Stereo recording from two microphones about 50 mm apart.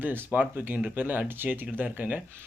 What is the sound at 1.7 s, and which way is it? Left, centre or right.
Speech, right.